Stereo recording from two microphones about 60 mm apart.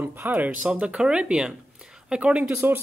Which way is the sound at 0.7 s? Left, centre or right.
Centre.